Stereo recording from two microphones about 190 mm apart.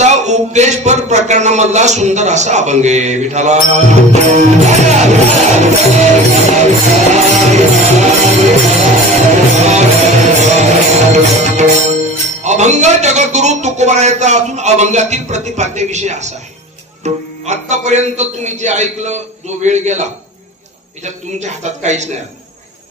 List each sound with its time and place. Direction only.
0.0 s a man's voice: 35° right (ahead or behind)
7.2 s music: 35° right (ahead or behind)
12.4 s a man's voice: 35° right (ahead or behind)